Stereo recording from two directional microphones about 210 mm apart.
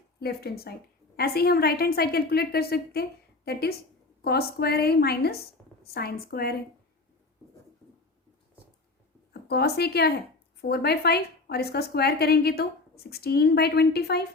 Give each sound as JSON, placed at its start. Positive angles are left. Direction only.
{"t": 0.2, "sound": "a woman's voice", "side_deg": 50}
{"t": 9.3, "sound": "a woman's voice", "side_deg": 50}